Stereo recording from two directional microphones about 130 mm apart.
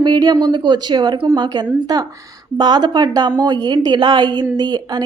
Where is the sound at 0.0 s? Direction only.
30° right (ahead or behind).